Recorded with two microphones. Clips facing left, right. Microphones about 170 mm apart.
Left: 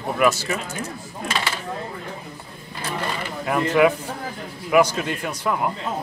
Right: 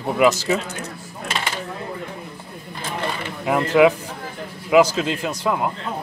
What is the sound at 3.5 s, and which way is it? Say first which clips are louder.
A man's voice: right 3 dB; 20° right (ahead or behind).